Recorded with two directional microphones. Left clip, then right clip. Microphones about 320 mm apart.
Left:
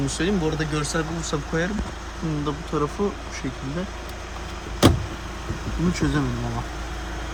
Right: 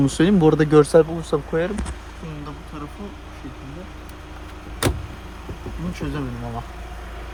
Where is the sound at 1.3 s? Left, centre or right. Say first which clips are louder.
Right 7 dB; centre.